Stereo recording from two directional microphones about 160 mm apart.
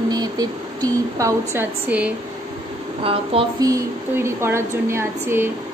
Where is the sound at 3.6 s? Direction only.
20° right (ahead or behind).